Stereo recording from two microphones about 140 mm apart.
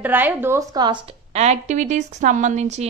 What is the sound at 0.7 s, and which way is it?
Speech, 35° right (ahead or behind).